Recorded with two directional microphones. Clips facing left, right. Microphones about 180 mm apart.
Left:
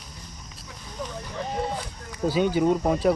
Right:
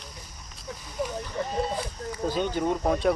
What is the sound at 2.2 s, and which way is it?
Speech, 10° left (ahead or behind).